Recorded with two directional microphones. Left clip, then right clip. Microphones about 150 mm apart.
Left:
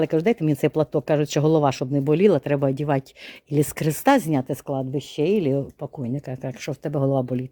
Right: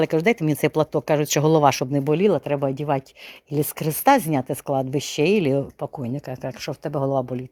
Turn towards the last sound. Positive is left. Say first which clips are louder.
# even
turn(degrees=35)  # may be behind; listen again after turning